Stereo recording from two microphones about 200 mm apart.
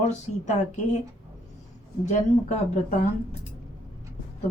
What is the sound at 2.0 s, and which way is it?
Speech, 35° left (ahead or behind).